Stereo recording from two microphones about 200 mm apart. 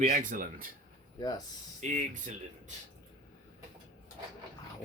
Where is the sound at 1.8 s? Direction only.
40° right (ahead or behind).